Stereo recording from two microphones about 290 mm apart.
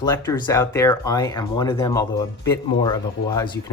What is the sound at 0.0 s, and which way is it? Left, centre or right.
Speech, centre.